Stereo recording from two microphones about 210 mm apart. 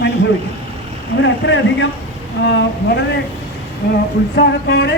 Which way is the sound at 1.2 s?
60° left (ahead or behind).